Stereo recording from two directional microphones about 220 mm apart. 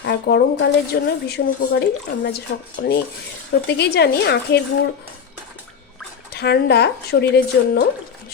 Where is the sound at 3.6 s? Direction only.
50° left (ahead or behind).